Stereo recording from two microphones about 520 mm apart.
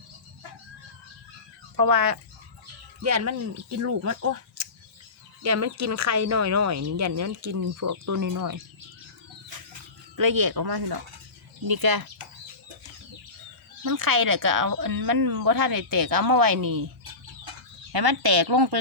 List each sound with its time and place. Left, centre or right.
1.7 s speech: right
9.5 s a sound: right
10.2 s speech: right
13.8 s speech: right
17.9 s speech: right